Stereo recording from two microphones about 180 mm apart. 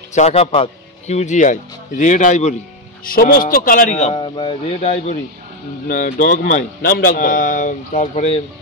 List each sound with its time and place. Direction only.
0.1 s speech: 40° left (ahead or behind)
3.1 s a man's voice: 55° left (ahead or behind); by 4.2 s 40° left (ahead or behind)
4.2 s speech: 25° left (ahead or behind)
5.9 s a man's voice: 50° left (ahead or behind)